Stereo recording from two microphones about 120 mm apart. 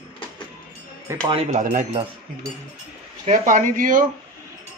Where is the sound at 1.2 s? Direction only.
50° right (ahead or behind).